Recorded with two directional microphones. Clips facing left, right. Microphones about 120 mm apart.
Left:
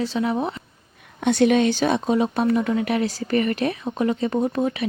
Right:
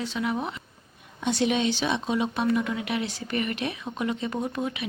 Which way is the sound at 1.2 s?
55° left (ahead or behind).